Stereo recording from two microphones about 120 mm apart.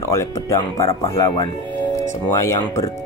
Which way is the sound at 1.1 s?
40° left (ahead or behind).